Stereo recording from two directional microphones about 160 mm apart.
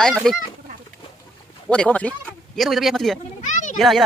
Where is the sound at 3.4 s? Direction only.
50° left (ahead or behind).